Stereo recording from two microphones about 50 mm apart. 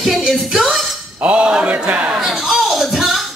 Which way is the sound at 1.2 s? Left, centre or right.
Centre.